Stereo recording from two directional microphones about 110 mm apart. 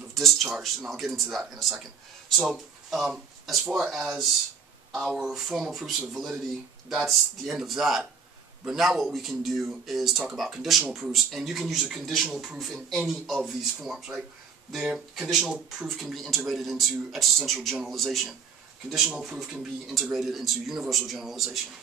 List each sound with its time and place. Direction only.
0.1 s speech: centre (ahead or behind)